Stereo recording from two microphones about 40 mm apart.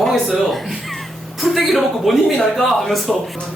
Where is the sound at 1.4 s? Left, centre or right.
Centre.